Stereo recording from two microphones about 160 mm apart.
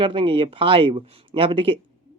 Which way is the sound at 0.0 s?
35° right (ahead or behind).